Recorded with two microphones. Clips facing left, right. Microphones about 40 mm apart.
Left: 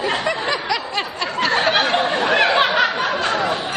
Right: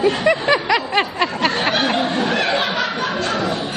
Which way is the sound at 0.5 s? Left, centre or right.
Centre.